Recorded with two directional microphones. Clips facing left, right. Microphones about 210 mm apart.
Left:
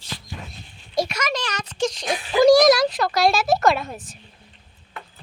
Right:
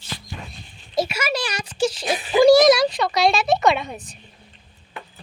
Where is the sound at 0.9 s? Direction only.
5° right (ahead or behind).